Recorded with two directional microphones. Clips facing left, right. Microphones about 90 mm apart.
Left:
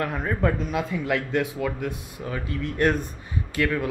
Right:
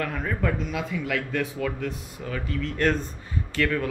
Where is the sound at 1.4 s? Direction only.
15° left (ahead or behind).